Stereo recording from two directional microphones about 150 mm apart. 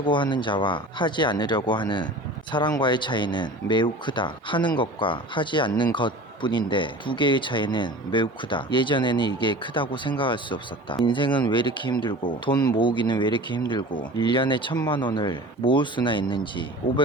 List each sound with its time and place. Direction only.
0.0 s speech: 30° left (ahead or behind)